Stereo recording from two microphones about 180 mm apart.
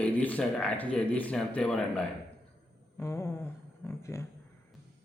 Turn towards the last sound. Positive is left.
turn(degrees=15)  # may be behind; listen again after turning